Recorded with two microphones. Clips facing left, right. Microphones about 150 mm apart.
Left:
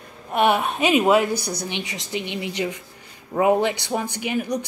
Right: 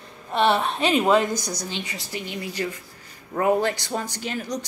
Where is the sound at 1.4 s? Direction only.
60° left (ahead or behind).